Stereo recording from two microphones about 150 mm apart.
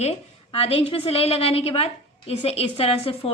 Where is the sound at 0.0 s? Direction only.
40° left (ahead or behind).